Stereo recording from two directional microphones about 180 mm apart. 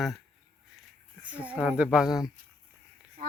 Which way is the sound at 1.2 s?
10° right (ahead or behind).